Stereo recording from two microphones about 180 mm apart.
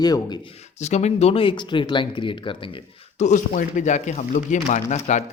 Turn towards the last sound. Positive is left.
turn(degrees=40)  # may be behind; listen again after turning